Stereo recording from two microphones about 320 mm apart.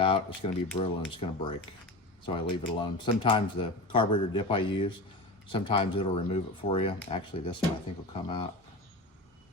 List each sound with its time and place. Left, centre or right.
0.0 s speech: centre